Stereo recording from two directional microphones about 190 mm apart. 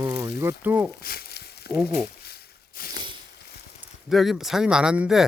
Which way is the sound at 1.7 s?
5° right (ahead or behind).